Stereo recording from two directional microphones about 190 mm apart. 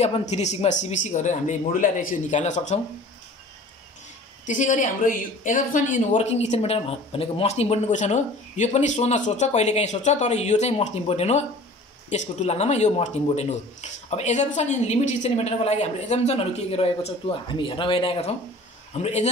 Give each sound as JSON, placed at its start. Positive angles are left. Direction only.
{"t": 0.0, "sound": "speech", "side_deg": 35}
{"t": 4.5, "sound": "speech", "side_deg": 40}